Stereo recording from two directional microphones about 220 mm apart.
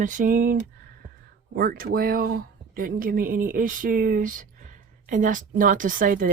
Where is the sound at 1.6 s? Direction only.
40° right (ahead or behind).